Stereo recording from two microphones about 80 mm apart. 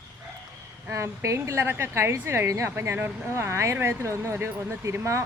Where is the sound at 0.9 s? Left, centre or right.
Right.